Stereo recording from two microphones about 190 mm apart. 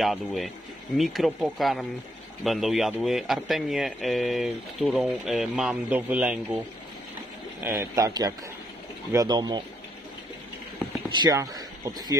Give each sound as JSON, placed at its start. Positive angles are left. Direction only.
{"t": 0.0, "sound": "speech", "side_deg": 0}
{"t": 7.6, "sound": "a man's voice", "side_deg": -10}
{"t": 11.1, "sound": "speech", "side_deg": -20}